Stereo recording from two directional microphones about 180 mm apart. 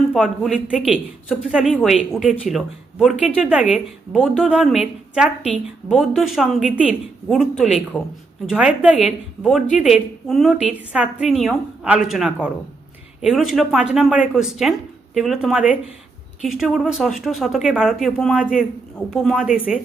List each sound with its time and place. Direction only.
0.1 s a woman's voice: centre (ahead or behind)